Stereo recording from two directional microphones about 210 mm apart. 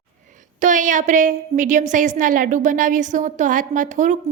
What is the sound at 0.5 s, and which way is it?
A woman's voice, 35° right (ahead or behind).